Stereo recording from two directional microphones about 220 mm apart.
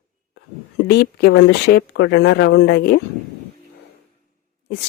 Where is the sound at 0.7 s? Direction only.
50° left (ahead or behind).